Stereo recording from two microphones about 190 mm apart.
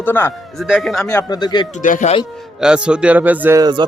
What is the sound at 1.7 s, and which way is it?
Speech, 40° left (ahead or behind).